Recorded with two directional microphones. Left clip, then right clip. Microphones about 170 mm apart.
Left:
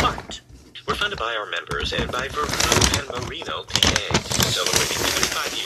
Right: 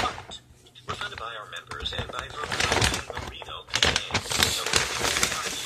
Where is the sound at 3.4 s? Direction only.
20° left (ahead or behind).